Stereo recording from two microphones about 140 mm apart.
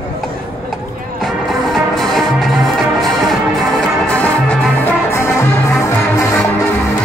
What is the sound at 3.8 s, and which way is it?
Music, 5° left (ahead or behind).